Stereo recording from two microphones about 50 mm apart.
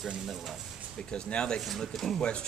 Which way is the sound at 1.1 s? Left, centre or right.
Centre.